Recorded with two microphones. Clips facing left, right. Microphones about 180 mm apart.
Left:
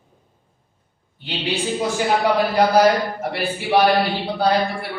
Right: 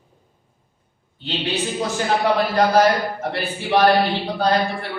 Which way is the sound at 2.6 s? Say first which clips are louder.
Left 1 dB; 10° left (ahead or behind).